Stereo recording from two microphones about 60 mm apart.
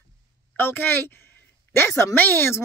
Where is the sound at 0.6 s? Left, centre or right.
Left.